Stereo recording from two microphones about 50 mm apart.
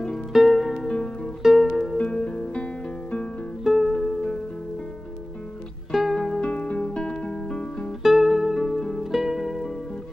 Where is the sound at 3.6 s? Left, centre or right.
Centre.